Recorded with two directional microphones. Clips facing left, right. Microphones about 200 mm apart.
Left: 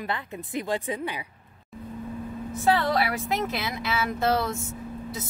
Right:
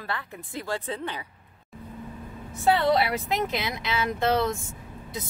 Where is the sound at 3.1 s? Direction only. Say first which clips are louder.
Even; centre (ahead or behind).